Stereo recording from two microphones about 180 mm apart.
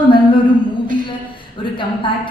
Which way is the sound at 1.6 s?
30° left (ahead or behind).